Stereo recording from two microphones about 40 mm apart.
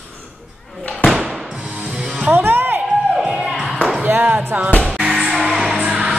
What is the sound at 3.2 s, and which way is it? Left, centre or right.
Music, centre.